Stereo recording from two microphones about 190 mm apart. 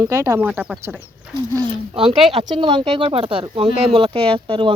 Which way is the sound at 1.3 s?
25° right (ahead or behind).